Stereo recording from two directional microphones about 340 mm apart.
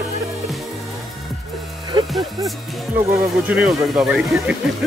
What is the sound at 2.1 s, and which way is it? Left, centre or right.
Speech, centre.